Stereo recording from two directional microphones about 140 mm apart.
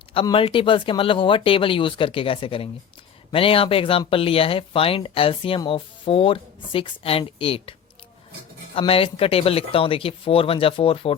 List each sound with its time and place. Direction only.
0.1 s speech: 40° left (ahead or behind)
8.9 s speech: 40° left (ahead or behind)